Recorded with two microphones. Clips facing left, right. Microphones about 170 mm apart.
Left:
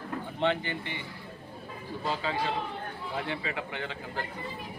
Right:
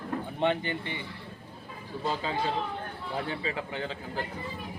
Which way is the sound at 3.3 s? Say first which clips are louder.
Right 1 dB; 35° right (ahead or behind).